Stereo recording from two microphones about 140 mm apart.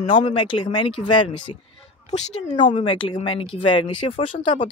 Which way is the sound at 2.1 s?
50° left (ahead or behind).